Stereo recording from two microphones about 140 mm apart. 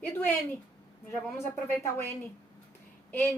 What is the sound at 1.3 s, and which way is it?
Music, 15° left (ahead or behind).